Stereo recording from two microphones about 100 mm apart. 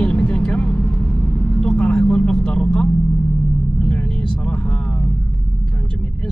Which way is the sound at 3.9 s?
10° left (ahead or behind).